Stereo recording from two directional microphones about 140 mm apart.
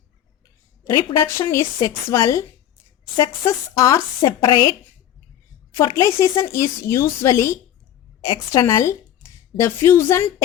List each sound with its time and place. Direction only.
0.9 s speech: 20° left (ahead or behind)
5.7 s speech: 20° left (ahead or behind)
8.6 s speech: 20° left (ahead or behind)